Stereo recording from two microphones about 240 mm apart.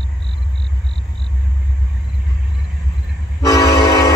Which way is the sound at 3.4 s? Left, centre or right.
Centre.